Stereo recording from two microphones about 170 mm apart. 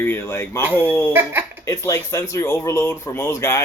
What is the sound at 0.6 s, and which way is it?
Speech, 10° right (ahead or behind).